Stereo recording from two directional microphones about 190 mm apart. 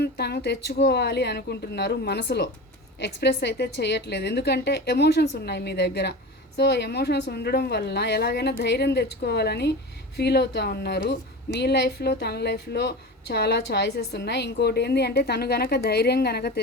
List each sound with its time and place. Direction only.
0.0 s a woman's voice: 60° left (ahead or behind)